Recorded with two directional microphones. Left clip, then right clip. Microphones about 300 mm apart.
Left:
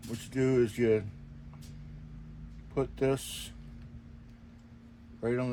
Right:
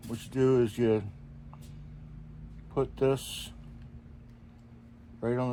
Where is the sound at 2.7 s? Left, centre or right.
Centre.